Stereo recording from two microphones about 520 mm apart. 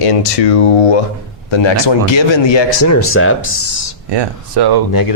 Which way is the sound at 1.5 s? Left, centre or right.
Left.